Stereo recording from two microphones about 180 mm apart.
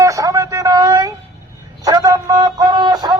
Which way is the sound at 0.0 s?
20° right (ahead or behind).